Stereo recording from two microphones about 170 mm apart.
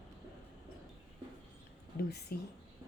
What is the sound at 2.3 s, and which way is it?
Speech, 65° left (ahead or behind).